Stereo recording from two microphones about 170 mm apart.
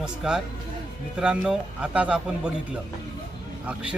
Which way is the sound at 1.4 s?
5° right (ahead or behind).